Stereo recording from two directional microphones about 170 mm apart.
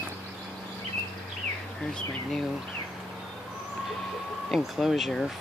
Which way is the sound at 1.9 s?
Centre (ahead or behind).